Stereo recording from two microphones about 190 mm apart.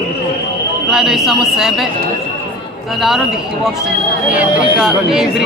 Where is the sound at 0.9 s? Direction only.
Centre (ahead or behind).